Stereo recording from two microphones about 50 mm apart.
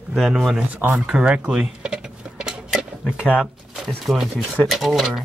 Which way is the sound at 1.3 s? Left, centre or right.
Centre.